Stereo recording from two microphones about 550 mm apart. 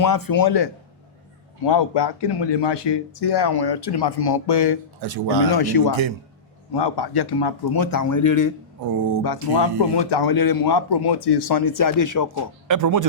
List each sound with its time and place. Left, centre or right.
0.0 s speech: left
5.0 s speech: right
5.5 s speech: left
12.6 s speech: right